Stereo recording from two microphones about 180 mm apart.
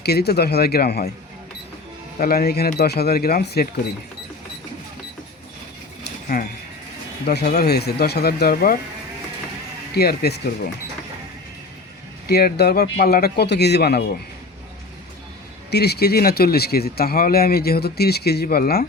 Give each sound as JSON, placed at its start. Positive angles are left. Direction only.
{"t": 0.0, "sound": "speech", "side_deg": 65}
{"t": 2.1, "sound": "speech", "side_deg": 55}
{"t": 6.3, "sound": "speech", "side_deg": 50}
{"t": 7.3, "sound": "speech", "side_deg": 65}
{"t": 9.9, "sound": "speech", "side_deg": 60}
{"t": 12.3, "sound": "speech", "side_deg": 60}
{"t": 15.7, "sound": "speech", "side_deg": 65}